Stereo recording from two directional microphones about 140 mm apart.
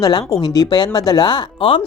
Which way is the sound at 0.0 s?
25° left (ahead or behind).